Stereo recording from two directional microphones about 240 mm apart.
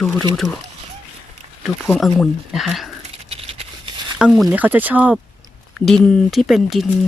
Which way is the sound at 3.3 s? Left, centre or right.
Right.